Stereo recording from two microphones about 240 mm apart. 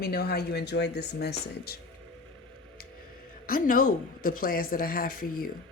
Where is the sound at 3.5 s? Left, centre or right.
Left.